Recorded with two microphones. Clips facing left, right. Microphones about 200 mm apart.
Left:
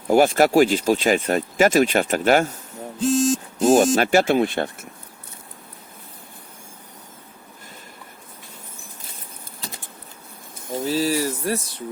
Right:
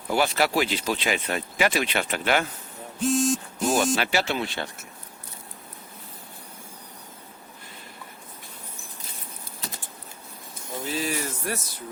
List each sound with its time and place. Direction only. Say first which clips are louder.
0.1 s speech: left 8 dB; 45° left (ahead or behind)
3.6 s speech: left 9 dB; 40° left (ahead or behind)
10.7 s speech: left 7 dB; 40° left (ahead or behind)